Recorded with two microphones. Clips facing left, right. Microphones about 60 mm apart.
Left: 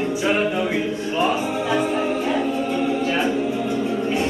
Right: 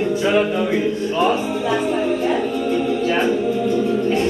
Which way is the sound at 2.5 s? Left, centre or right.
Left.